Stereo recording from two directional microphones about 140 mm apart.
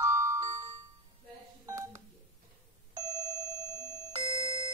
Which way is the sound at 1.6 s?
20° right (ahead or behind).